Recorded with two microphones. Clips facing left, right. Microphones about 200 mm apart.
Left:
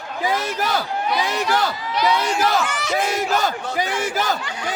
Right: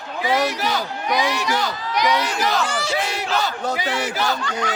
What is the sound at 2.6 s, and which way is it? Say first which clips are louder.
Speech: right 1 dB; 30° right (ahead or behind).